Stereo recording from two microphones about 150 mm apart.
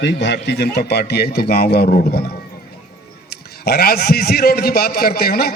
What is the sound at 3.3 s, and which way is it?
A man's voice, 90° left.